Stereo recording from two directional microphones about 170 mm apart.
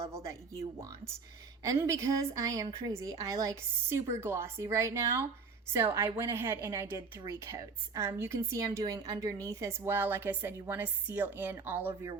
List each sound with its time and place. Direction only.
0.0 s speech: 20° right (ahead or behind)
1.6 s a woman's voice: 15° right (ahead or behind)